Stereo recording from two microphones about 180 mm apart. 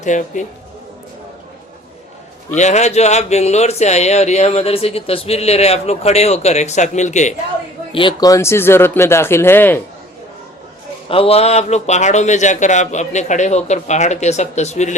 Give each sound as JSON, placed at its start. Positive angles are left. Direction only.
{"t": 0.0, "sound": "speech", "side_deg": 45}
{"t": 2.6, "sound": "speech", "side_deg": 40}
{"t": 7.9, "sound": "speech", "side_deg": 25}
{"t": 11.1, "sound": "speech", "side_deg": 30}